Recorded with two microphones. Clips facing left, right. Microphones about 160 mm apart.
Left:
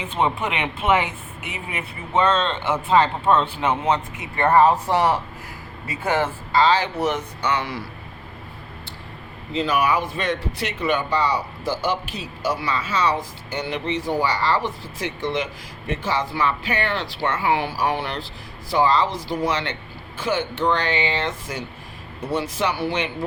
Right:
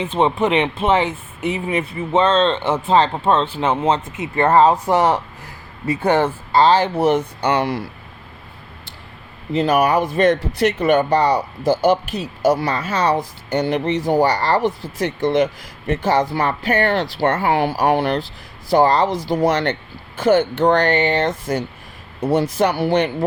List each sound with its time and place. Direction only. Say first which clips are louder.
0.0 s speech: right 6 dB; 25° right (ahead or behind)
6.6 s speech: right 4 dB; 50° right (ahead or behind)
6.9 s speech: right 7 dB; 30° right (ahead or behind)
9.5 s speech: right 5 dB; 45° right (ahead or behind)
11.6 s a man's voice: right 8 dB; 20° right (ahead or behind)
11.9 s speech: right 8 dB; 45° right (ahead or behind)